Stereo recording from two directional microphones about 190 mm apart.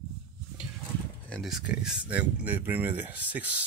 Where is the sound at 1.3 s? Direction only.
Centre (ahead or behind).